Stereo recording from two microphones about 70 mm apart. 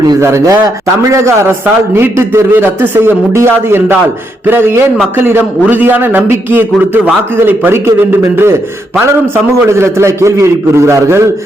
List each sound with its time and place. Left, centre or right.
0.2 s a man's voice: right
9.0 s a man's voice: right